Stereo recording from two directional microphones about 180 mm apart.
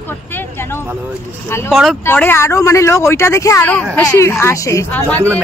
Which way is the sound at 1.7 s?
Centre (ahead or behind).